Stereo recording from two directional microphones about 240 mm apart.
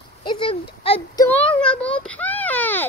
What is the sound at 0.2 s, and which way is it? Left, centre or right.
Speech, centre.